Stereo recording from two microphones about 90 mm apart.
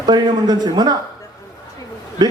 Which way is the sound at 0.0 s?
50° right (ahead or behind).